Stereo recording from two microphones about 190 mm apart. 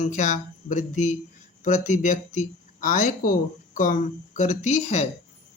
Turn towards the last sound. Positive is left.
turn(degrees=40)  # may be behind; listen again after turning